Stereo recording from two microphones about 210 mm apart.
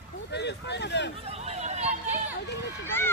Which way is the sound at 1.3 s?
30° right (ahead or behind).